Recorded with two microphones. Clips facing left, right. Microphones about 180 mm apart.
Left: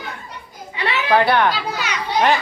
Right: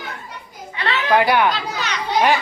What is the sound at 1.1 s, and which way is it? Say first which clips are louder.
Speech: even; 10° right (ahead or behind).